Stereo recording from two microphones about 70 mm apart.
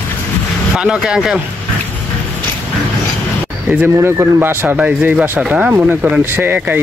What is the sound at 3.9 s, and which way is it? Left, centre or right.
Speech, right.